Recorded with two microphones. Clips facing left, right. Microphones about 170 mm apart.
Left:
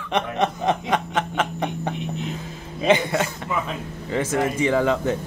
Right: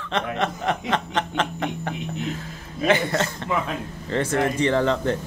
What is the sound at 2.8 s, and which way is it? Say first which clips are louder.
Speech: left 1 dB; 15° left (ahead or behind).